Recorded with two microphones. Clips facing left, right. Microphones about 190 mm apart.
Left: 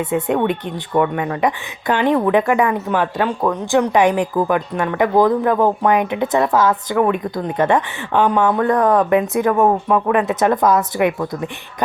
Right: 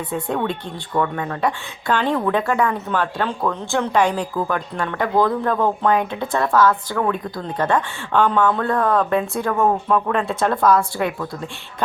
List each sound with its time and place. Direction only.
0.0 s a woman's voice: 20° left (ahead or behind)